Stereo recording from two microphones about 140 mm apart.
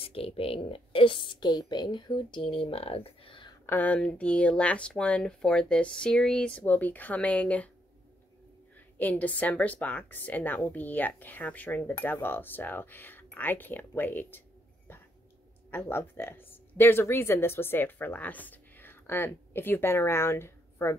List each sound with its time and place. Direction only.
0.0 s a woman's voice: 45° left (ahead or behind)
3.6 s speech: 15° left (ahead or behind)
8.9 s speech: 10° left (ahead or behind)
15.7 s speech: 15° left (ahead or behind)